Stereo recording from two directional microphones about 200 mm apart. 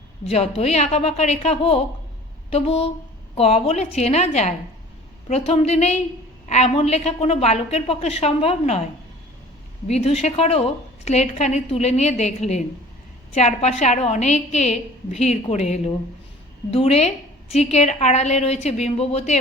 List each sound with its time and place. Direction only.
0.3 s a woman's voice: 30° left (ahead or behind)
2.5 s a sound: 30° left (ahead or behind)
3.3 s a woman's voice: 30° left (ahead or behind)
9.8 s a woman's voice: 30° left (ahead or behind)